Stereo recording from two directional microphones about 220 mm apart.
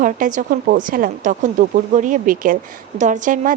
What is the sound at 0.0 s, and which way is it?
Speech, 35° right (ahead or behind).